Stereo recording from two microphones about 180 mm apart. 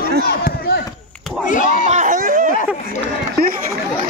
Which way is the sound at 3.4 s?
60° right (ahead or behind).